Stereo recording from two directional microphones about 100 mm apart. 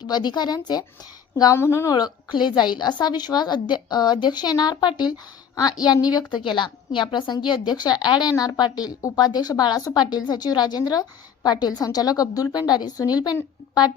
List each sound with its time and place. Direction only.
0.0 s a woman's voice: 45° left (ahead or behind)
1.5 s speech: 25° left (ahead or behind)
2.3 s a woman's voice: 50° left (ahead or behind)